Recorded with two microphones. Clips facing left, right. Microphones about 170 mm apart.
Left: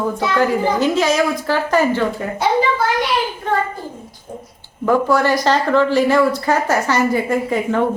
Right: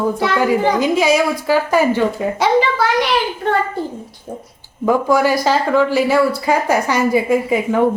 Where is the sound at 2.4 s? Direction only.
80° right.